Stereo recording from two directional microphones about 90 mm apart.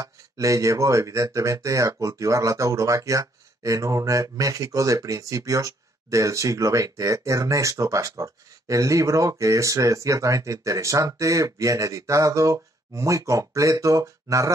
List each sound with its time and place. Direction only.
0.0 s speech: 35° right (ahead or behind)